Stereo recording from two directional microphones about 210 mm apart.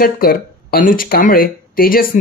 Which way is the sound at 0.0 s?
45° left (ahead or behind).